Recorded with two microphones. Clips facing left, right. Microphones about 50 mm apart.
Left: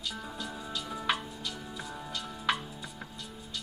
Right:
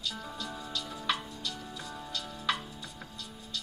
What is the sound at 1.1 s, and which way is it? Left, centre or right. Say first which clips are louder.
Music: even; centre.